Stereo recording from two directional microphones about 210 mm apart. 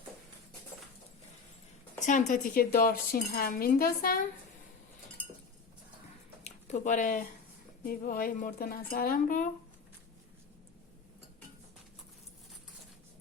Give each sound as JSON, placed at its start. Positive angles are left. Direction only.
{"t": 2.0, "sound": "dishes", "side_deg": 35}
{"t": 6.4, "sound": "speech", "side_deg": 35}
{"t": 7.9, "sound": "dishes", "side_deg": 45}